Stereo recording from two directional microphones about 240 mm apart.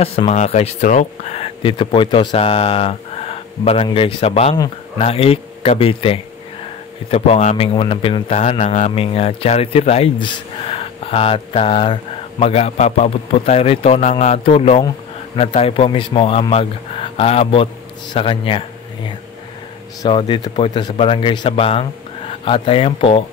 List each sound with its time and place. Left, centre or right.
0.0 s speech: left
20.0 s speech: centre